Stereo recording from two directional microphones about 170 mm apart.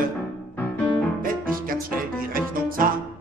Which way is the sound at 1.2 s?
55° right (ahead or behind).